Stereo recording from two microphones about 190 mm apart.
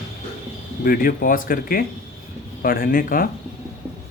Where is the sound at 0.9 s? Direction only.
50° left (ahead or behind).